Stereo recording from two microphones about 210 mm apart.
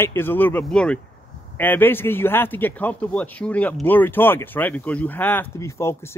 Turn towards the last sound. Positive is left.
turn(degrees=10)  # may be behind; listen again after turning